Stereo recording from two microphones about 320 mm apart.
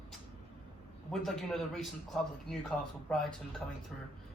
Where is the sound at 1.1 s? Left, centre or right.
Centre.